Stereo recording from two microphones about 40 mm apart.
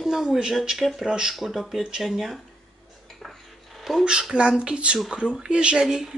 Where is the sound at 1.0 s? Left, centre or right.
Centre.